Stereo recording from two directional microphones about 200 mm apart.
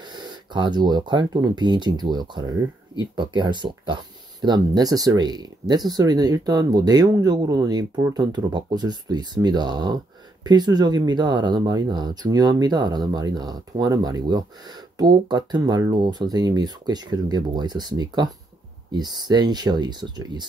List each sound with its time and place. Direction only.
0.0 s speech: 20° right (ahead or behind)